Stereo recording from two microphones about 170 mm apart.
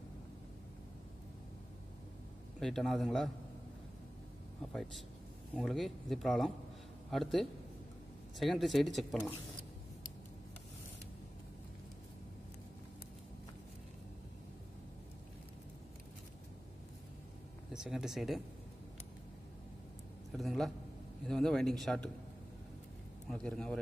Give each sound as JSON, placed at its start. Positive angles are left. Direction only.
{"t": 2.6, "sound": "speech", "side_deg": 0}
{"t": 5.5, "sound": "speech", "side_deg": 0}
{"t": 17.7, "sound": "speech", "side_deg": -5}
{"t": 20.3, "sound": "speech", "side_deg": 0}
{"t": 23.3, "sound": "speech", "side_deg": 5}